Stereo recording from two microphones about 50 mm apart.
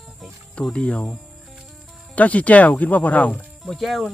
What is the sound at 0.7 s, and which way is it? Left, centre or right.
Speech, left.